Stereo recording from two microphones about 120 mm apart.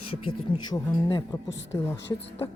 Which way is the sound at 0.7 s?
30° left (ahead or behind).